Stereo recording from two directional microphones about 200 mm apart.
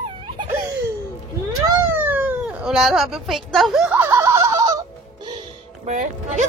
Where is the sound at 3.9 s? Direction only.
15° right (ahead or behind).